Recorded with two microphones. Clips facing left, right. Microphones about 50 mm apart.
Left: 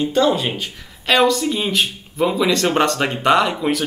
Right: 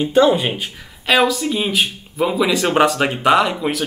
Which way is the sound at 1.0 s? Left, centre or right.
Centre.